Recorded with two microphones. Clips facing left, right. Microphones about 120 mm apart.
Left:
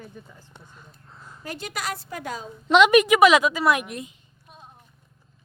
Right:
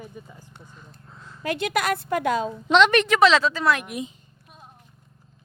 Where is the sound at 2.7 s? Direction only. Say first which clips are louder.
Left 2 dB; 10° left (ahead or behind).